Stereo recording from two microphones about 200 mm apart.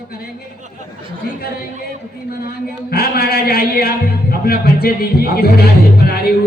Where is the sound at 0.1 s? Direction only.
50° left (ahead or behind).